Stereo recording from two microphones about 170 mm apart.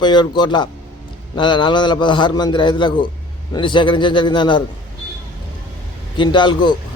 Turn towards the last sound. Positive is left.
turn(degrees=25)  # may be behind; listen again after turning